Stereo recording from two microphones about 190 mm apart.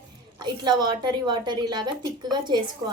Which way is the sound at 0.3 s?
25° right (ahead or behind).